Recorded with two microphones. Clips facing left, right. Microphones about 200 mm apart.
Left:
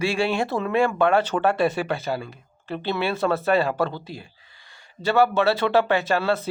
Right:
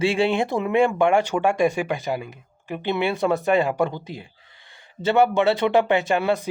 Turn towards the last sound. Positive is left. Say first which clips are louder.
# right 1 dB
turn(degrees=-15)  # may be behind; listen again after turning